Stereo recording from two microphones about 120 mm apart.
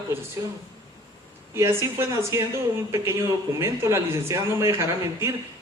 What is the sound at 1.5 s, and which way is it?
Speech, 25° right (ahead or behind).